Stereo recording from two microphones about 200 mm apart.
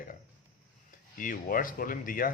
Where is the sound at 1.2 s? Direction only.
45° left (ahead or behind).